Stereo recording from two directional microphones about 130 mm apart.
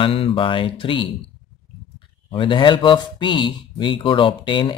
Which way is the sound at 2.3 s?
40° left (ahead or behind).